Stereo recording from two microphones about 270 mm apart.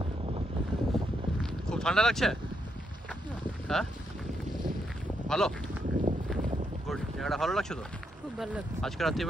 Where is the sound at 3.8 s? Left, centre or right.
Centre.